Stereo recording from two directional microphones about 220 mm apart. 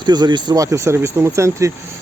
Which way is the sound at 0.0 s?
20° right (ahead or behind).